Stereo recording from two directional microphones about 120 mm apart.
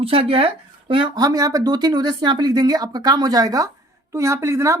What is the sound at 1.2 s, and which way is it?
A woman's voice, 30° right (ahead or behind).